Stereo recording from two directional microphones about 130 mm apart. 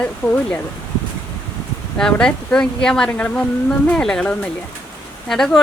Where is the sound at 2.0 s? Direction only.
5° left (ahead or behind).